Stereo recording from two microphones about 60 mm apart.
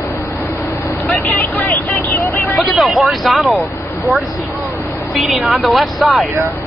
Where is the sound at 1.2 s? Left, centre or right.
Left.